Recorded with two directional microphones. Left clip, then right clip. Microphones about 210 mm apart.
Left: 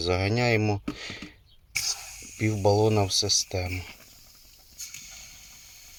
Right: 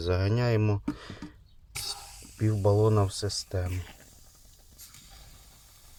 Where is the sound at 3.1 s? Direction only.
45° right (ahead or behind).